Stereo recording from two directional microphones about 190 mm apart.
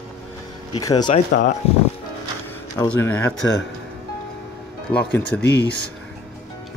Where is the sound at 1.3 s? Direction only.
50° left (ahead or behind).